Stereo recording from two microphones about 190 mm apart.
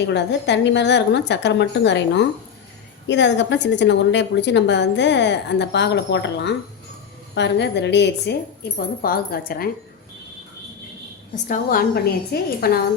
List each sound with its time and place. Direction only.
0.1 s a woman's voice: 65° left (ahead or behind)
9.0 s a woman's voice: 50° left (ahead or behind)
11.4 s a woman's voice: 45° left (ahead or behind)